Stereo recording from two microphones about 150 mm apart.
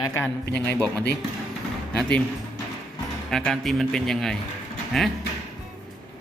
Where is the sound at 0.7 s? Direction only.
5° left (ahead or behind).